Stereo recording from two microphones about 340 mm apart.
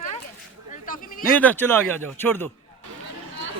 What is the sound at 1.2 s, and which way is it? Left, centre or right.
A man's voice, centre.